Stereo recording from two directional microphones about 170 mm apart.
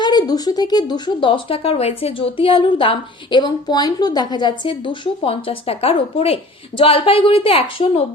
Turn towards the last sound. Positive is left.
turn(degrees=30)  # may be behind; listen again after turning